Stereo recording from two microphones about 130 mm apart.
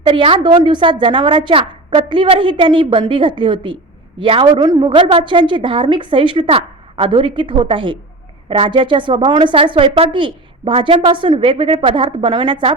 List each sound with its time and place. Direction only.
0.0 s a woman's voice: 40° right (ahead or behind)